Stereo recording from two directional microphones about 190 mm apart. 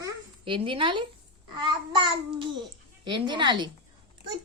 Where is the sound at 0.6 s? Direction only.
25° right (ahead or behind).